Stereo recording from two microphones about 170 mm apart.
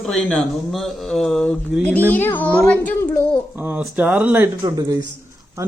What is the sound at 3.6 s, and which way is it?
Speech, 10° right (ahead or behind).